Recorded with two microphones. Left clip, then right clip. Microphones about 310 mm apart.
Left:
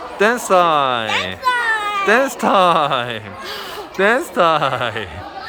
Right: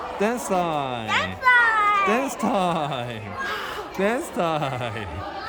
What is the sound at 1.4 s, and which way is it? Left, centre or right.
Children playing, left.